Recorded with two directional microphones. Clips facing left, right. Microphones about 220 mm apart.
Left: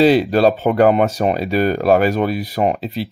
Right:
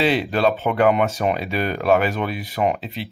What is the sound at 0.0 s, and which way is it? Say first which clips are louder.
Speech: left 7 dB; 40° left (ahead or behind).